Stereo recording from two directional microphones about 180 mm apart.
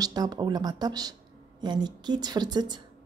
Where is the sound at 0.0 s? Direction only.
20° right (ahead or behind).